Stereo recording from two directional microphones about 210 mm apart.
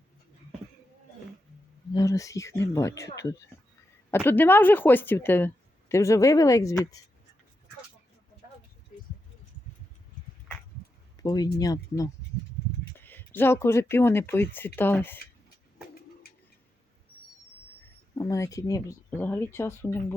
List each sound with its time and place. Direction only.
1.9 s speech: 15° left (ahead or behind)
11.2 s speech: 15° left (ahead or behind)
18.1 s speech: 15° left (ahead or behind)